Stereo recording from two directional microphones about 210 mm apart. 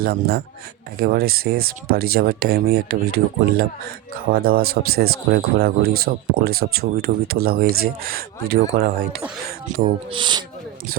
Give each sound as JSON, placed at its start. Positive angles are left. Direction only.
{"t": 0.0, "sound": "speech", "side_deg": -50}
{"t": 9.8, "sound": "speech", "side_deg": -25}